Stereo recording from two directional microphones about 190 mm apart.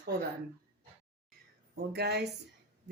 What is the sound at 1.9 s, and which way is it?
Speech, 60° right (ahead or behind).